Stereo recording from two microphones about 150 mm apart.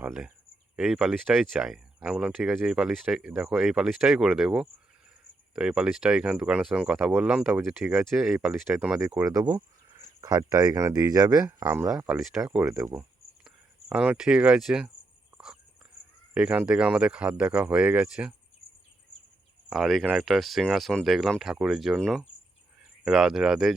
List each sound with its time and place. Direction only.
0.0 s speech: 5° right (ahead or behind)
9.0 s speech: 20° right (ahead or behind)
11.4 s speech: 15° right (ahead or behind)
12.0 s speech: 5° right (ahead or behind)
12.5 s speech: 15° right (ahead or behind)
13.9 s speech: 5° right (ahead or behind)
16.3 s speech: 5° right (ahead or behind)
19.7 s speech: centre (ahead or behind)